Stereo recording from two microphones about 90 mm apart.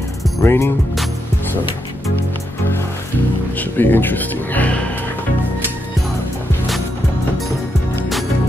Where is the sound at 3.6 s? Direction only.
20° left (ahead or behind).